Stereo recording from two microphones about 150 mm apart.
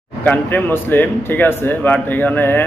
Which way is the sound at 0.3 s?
10° left (ahead or behind).